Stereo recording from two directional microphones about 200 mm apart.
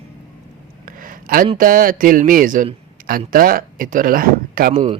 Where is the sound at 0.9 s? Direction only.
45° right (ahead or behind).